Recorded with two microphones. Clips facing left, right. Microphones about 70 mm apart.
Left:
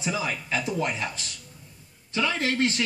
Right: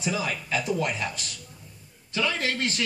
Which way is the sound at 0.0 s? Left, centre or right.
Left.